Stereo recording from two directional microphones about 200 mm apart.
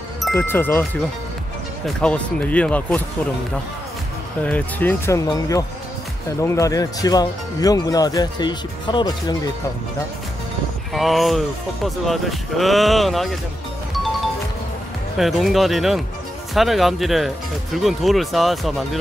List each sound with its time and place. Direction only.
0.3 s speech: 10° left (ahead or behind)
1.9 s speech: 5° left (ahead or behind)
4.4 s speech: 5° left (ahead or behind)
10.9 s speech: centre (ahead or behind)
15.1 s speech: centre (ahead or behind)